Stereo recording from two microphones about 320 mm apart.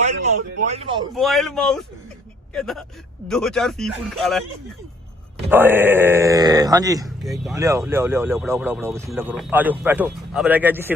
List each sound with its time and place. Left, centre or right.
0.7 s speech: centre
1.1 s speech: centre
5.5 s speech: centre
7.2 s speech: centre